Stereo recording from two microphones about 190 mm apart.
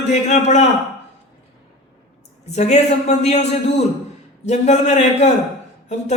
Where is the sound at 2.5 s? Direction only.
35° left (ahead or behind).